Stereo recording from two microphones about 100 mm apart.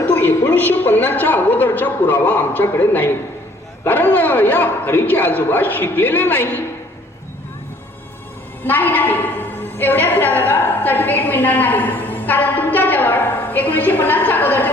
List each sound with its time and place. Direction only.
0.0 s a woman's voice: 20° left (ahead or behind)
8.6 s a woman's voice: 20° left (ahead or behind)